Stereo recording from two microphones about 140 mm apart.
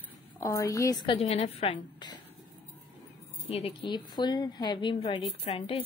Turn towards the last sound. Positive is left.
turn(degrees=45)  # may be behind; listen again after turning